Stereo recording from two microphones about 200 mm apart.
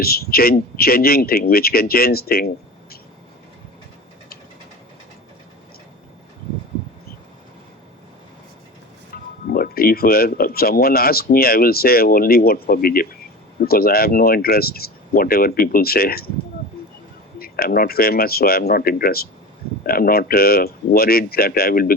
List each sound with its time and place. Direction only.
0.0 s speech: 50° left (ahead or behind)
9.5 s speech: 45° left (ahead or behind)
17.3 s speech: 50° left (ahead or behind)